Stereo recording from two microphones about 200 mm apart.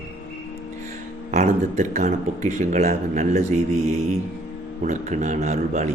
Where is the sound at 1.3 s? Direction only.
35° right (ahead or behind).